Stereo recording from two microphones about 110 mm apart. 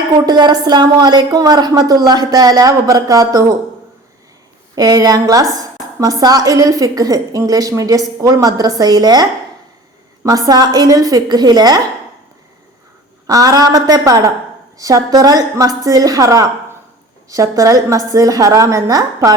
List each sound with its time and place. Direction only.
0.3 s a woman's voice: 40° right (ahead or behind)
4.7 s a woman's voice: 35° right (ahead or behind)
10.2 s a woman's voice: 35° right (ahead or behind)
13.2 s a woman's voice: 30° right (ahead or behind)